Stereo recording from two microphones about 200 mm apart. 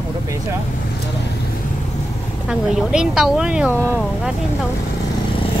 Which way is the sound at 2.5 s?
5° right (ahead or behind).